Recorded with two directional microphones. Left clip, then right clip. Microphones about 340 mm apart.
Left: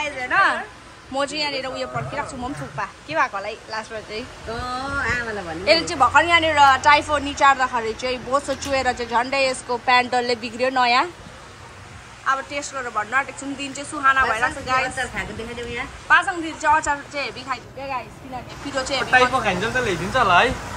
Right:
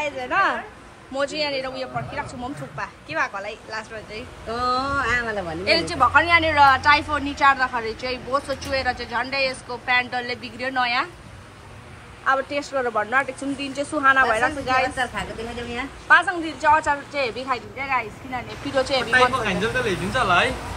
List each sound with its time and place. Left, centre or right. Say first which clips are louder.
0.0 s a sound: left 2 dB; centre
1.1 s a woman's voice: left 1 dB; centre
4.9 s speech: right 1 dB; right
5.7 s a woman's voice: left 2 dB; centre
12.3 s a woman's voice: right 1 dB; centre
16.1 s a woman's voice: right 1 dB; centre
19.0 s speech: left 5 dB; left